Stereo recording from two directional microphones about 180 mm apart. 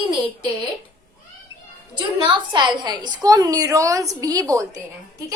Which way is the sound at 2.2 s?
25° right (ahead or behind).